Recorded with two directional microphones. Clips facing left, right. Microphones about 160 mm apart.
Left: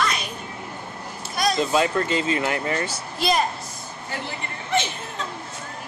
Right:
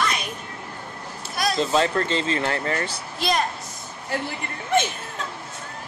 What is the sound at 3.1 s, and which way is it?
Speech, centre (ahead or behind).